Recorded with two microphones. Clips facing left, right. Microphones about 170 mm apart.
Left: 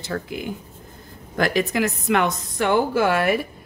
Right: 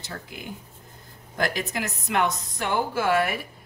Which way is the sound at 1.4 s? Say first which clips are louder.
Left 7 dB; 90° left.